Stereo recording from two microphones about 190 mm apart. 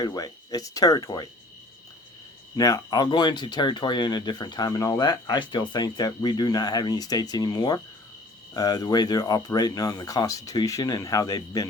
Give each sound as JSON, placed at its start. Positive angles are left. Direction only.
{"t": 0.0, "sound": "speech", "side_deg": 20}
{"t": 2.6, "sound": "speech", "side_deg": 20}